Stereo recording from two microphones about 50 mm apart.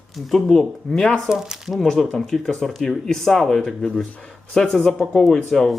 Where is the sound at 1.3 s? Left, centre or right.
Centre.